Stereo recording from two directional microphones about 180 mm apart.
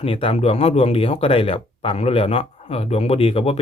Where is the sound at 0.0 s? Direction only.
30° left (ahead or behind).